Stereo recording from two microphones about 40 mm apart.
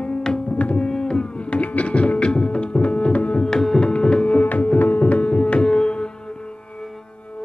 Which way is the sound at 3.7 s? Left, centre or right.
Left.